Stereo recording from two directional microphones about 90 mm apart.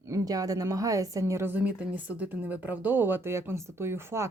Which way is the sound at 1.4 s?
20° right (ahead or behind).